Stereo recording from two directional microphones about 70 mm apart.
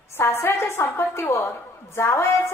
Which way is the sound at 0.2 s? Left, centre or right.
Left.